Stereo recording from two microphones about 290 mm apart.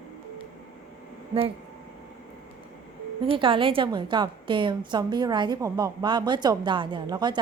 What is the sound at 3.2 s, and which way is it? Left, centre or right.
A woman's voice, centre.